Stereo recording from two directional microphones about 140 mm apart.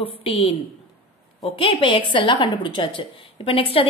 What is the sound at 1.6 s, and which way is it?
A woman's voice, 35° left (ahead or behind).